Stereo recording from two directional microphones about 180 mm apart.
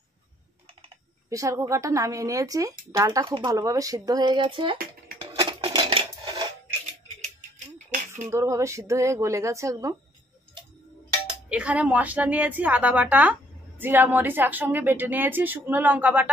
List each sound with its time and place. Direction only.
1.3 s speech: 15° right (ahead or behind)
5.3 s a sound: 30° right (ahead or behind)
8.3 s a woman's voice: 15° right (ahead or behind)
11.4 s a woman's voice: 5° right (ahead or behind)